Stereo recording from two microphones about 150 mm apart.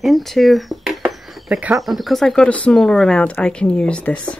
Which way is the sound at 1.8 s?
Centre (ahead or behind).